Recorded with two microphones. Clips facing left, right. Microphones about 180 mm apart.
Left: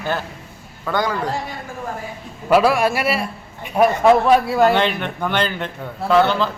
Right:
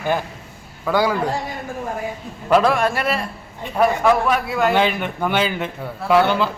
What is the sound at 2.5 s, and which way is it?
Speech, 5° left (ahead or behind).